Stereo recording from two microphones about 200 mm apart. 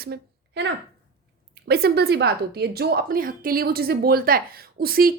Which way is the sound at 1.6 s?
50° right (ahead or behind).